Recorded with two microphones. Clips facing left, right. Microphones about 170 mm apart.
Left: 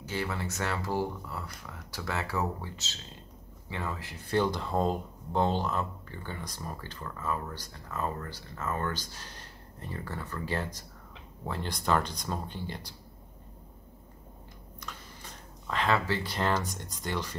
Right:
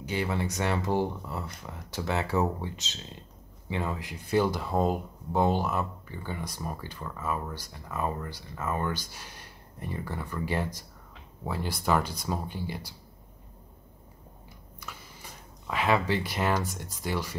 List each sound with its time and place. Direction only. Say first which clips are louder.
0.0 s speech: right 4 dB; 15° right (ahead or behind)
14.8 s a sound: even; 10° right (ahead or behind)
16.7 s speech: right 2 dB; 5° right (ahead or behind)